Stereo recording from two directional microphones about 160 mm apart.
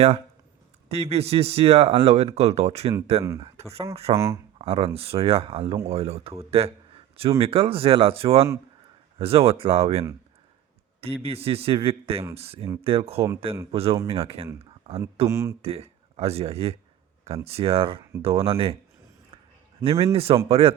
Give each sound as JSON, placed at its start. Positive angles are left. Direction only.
{"t": 0.9, "sound": "speech", "side_deg": -40}
{"t": 3.2, "sound": "speech", "side_deg": -20}
{"t": 3.6, "sound": "speech", "side_deg": -40}
{"t": 4.1, "sound": "speech", "side_deg": -15}
{"t": 4.5, "sound": "a sound", "side_deg": -35}
{"t": 4.9, "sound": "speech", "side_deg": -35}
{"t": 14.6, "sound": "a sound", "side_deg": -40}
{"t": 15.3, "sound": "speech", "side_deg": -15}
{"t": 15.6, "sound": "speech", "side_deg": -40}
{"t": 19.8, "sound": "speech", "side_deg": -35}